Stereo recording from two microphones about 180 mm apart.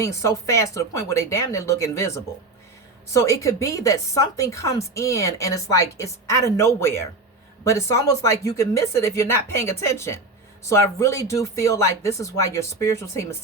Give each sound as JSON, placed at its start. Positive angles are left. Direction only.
{"t": 0.0, "sound": "speech", "side_deg": 15}